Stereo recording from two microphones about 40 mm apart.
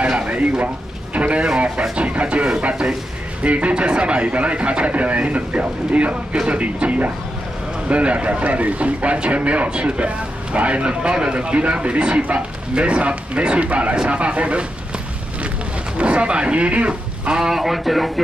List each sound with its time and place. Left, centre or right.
0.1 s frying: right
1.1 s speech: right
3.4 s a man's voice: right
16.0 s speech: right
17.4 s speech: centre